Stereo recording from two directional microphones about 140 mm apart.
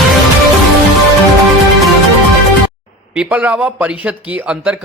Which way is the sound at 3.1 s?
10° right (ahead or behind).